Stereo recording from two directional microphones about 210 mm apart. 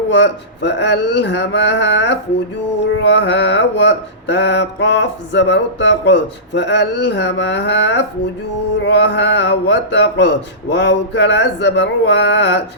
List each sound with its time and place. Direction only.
0.1 s mantra: 55° left (ahead or behind)